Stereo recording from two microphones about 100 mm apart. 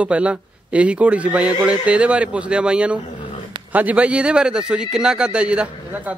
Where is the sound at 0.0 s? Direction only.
10° right (ahead or behind).